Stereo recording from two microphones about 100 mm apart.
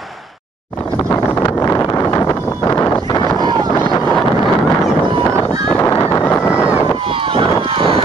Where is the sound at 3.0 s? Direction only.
40° left (ahead or behind).